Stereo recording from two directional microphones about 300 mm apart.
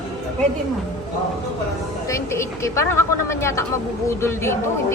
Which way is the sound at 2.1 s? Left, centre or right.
Centre.